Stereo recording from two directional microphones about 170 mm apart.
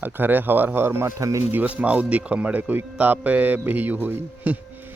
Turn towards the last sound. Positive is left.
turn(degrees=-10)  # may be behind; listen again after turning